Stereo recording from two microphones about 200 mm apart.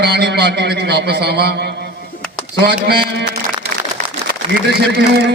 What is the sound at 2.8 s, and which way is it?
Speech, 55° right (ahead or behind).